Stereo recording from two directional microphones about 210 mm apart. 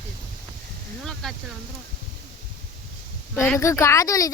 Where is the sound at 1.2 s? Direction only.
5° left (ahead or behind).